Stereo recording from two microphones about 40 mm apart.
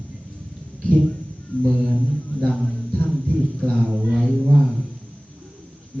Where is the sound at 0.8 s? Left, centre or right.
Right.